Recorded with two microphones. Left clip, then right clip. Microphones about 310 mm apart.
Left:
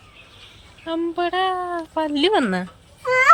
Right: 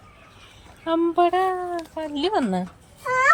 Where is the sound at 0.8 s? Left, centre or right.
Centre.